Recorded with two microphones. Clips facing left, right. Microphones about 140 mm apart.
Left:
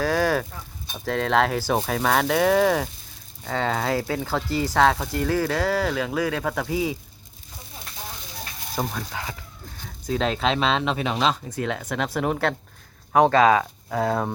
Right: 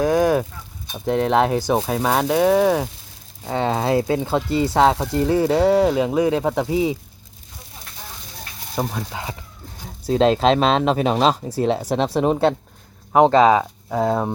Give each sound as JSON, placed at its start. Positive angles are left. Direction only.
{"t": 0.0, "sound": "speech", "side_deg": -20}
{"t": 8.8, "sound": "speech", "side_deg": -15}
{"t": 9.8, "sound": "speech", "side_deg": -35}